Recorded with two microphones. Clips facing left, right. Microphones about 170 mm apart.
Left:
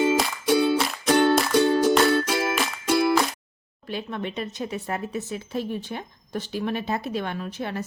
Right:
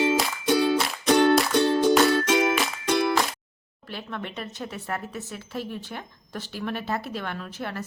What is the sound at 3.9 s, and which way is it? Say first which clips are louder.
Speech: left 4 dB; 15° left (ahead or behind).